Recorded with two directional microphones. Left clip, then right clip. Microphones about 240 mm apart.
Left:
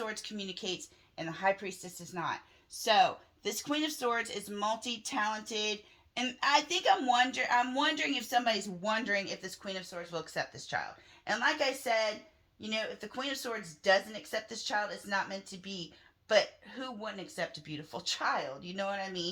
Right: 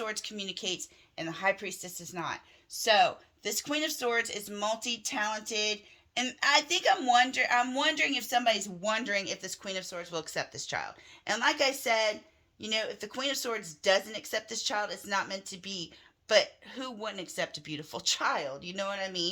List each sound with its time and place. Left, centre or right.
0.0 s speech: right